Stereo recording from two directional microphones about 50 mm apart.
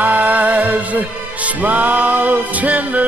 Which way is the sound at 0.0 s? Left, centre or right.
Right.